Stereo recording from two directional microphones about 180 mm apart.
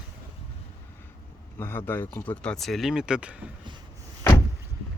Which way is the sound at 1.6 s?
10° left (ahead or behind).